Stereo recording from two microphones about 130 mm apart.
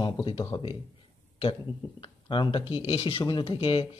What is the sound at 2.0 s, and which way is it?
Speech, 40° left (ahead or behind).